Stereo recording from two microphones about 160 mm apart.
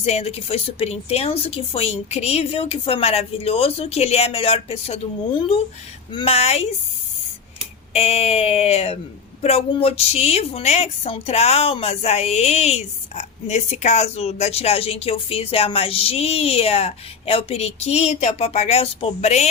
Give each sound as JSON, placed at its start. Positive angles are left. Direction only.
{"t": 0.0, "sound": "a woman's voice", "side_deg": 40}
{"t": 7.9, "sound": "a woman's voice", "side_deg": 40}